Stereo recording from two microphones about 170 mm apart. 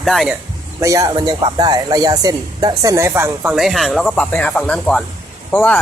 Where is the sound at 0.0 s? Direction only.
Centre (ahead or behind).